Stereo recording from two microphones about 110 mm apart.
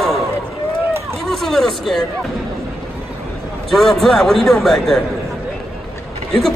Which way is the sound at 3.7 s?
Centre (ahead or behind).